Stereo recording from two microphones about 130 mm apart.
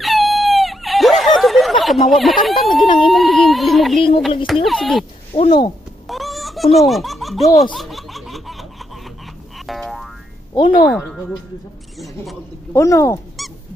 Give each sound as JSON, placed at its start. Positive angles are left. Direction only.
{"t": 0.0, "sound": "a sound", "side_deg": 0}
{"t": 3.1, "sound": "speech", "side_deg": 0}
{"t": 5.3, "sound": "speech", "side_deg": 45}
{"t": 6.0, "sound": "baby laughter", "side_deg": 0}
{"t": 7.7, "sound": "laughter", "side_deg": 0}
{"t": 9.7, "sound": "boing", "side_deg": 0}
{"t": 10.5, "sound": "speech", "side_deg": 35}
{"t": 11.0, "sound": "speech", "side_deg": 5}
{"t": 12.7, "sound": "speech", "side_deg": 25}